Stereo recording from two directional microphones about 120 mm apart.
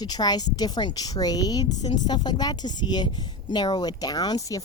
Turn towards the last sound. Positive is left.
turn(degrees=30)  # may be behind; listen again after turning